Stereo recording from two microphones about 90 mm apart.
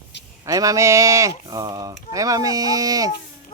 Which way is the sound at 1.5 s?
45° right (ahead or behind).